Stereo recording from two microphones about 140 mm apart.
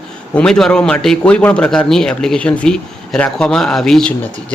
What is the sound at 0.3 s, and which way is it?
A man's voice, 5° left (ahead or behind).